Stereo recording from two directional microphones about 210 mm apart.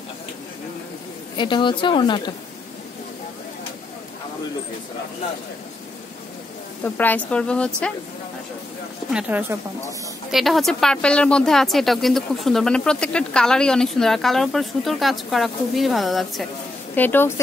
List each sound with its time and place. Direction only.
1.3 s a woman's voice: 20° left (ahead or behind)
6.8 s a woman's voice: 10° left (ahead or behind)
9.1 s a woman's voice: 10° right (ahead or behind); by 17.3 s 10° left (ahead or behind)